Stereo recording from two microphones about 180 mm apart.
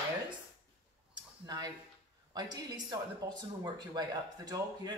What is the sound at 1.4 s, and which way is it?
A man's voice, 20° right (ahead or behind).